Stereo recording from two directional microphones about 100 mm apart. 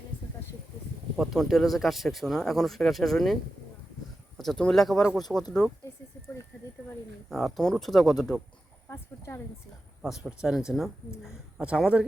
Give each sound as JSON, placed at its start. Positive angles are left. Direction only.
{"t": 1.1, "sound": "speech", "side_deg": -5}
{"t": 4.4, "sound": "speech", "side_deg": 5}
{"t": 7.3, "sound": "speech", "side_deg": 0}
{"t": 8.9, "sound": "a sound", "side_deg": 25}
{"t": 10.0, "sound": "speech", "side_deg": -5}
{"t": 11.2, "sound": "a sound", "side_deg": -10}